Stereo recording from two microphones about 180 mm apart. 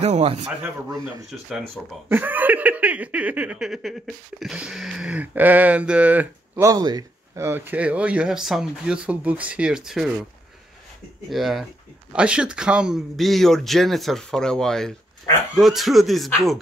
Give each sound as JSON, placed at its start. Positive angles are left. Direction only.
{"t": 0.0, "sound": "a man's voice", "side_deg": -35}
{"t": 2.0, "sound": "speech", "side_deg": -10}
{"t": 11.2, "sound": "speech", "side_deg": 0}